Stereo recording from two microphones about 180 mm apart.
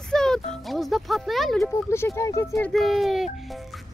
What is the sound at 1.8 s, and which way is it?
Speech, 15° left (ahead or behind).